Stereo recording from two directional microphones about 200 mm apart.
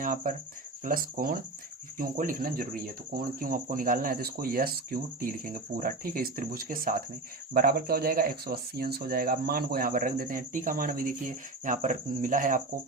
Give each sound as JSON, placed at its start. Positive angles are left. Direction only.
{"t": 0.0, "sound": "speech", "side_deg": -40}